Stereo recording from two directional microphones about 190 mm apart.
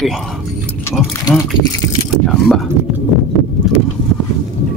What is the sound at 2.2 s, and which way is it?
Speech, centre (ahead or behind).